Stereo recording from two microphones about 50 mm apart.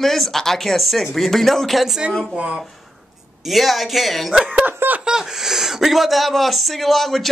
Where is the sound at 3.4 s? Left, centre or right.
Centre.